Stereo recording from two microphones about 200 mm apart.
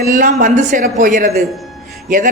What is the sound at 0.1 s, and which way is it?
A man's voice, 40° right (ahead or behind).